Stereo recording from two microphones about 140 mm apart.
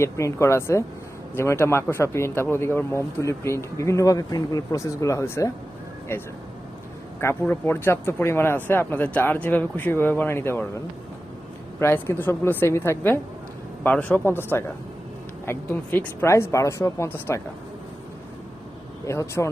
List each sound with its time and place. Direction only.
0.0 s speech: 20° left (ahead or behind)
7.2 s speech: 20° left (ahead or behind)
11.8 s speech: 15° left (ahead or behind)
19.0 s speech: 20° left (ahead or behind)